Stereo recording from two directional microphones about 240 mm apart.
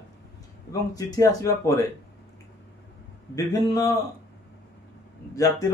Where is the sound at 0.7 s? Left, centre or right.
Centre.